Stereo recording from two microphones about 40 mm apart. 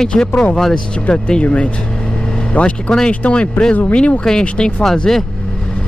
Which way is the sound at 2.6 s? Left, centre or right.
Left.